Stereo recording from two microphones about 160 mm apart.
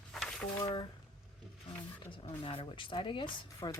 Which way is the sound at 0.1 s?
Centre (ahead or behind).